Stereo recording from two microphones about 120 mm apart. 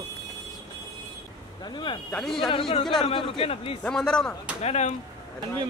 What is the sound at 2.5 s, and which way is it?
A man's voice, 45° left (ahead or behind).